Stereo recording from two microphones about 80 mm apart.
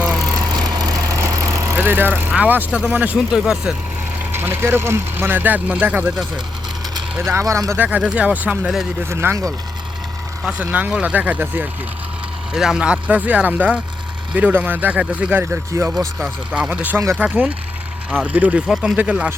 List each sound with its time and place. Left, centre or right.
0.5 s vehicle: right
1.7 s vehicle: right
2.3 s speech: right
3.2 s speech: centre
4.3 s speech: right
7.3 s speech: right
7.8 s speech: centre
9.0 s speech: right
10.6 s speech: centre
12.5 s speech: centre
15.7 s speech: right
16.5 s speech: centre
18.7 s speech: centre
18.9 s speech: centre